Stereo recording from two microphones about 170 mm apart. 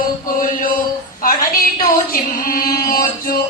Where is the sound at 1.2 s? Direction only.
55° left (ahead or behind).